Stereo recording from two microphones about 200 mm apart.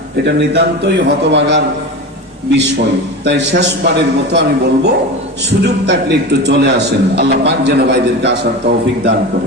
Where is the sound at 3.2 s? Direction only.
60° right (ahead or behind).